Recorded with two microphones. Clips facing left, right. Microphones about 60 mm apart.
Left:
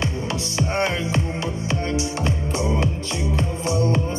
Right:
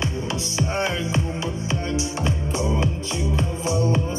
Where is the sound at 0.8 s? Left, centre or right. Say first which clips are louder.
Left 1 dB; left.